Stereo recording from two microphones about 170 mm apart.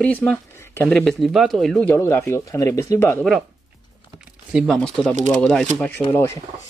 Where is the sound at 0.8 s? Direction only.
Centre (ahead or behind).